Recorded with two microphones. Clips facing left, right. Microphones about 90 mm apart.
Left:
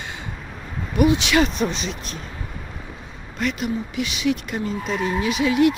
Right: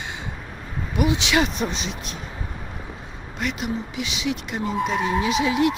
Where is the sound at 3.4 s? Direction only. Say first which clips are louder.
Left 3 dB; 20° right (ahead or behind).